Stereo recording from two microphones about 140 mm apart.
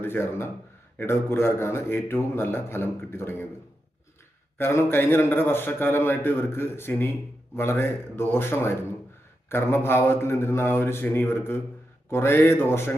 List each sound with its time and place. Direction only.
0.0 s a man's voice: 15° left (ahead or behind)
4.5 s a man's voice: 15° left (ahead or behind)